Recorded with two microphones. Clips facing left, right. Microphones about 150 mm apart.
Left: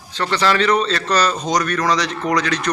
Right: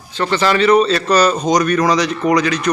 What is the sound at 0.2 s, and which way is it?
A man's voice, 5° right (ahead or behind).